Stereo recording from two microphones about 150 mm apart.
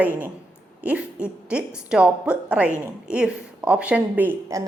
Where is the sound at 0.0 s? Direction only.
10° right (ahead or behind).